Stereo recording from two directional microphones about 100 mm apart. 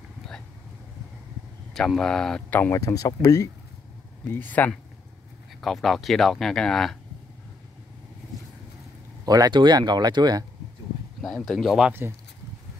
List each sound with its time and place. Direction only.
1.7 s speech: 5° left (ahead or behind)
2.7 s speech: 35° left (ahead or behind)
4.2 s speech: 20° left (ahead or behind)
5.6 s speech: centre (ahead or behind)
9.2 s speech: 40° right (ahead or behind)
11.1 s speech: centre (ahead or behind)